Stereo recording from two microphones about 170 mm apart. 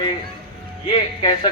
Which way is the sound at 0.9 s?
30° left (ahead or behind).